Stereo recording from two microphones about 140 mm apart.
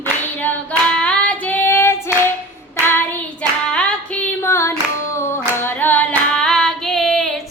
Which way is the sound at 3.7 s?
5° left (ahead or behind).